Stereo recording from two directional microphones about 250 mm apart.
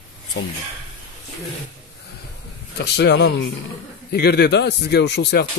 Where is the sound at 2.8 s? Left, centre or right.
Left.